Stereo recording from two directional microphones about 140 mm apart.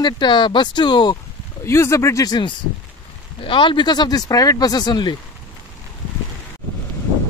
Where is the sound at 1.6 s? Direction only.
20° left (ahead or behind).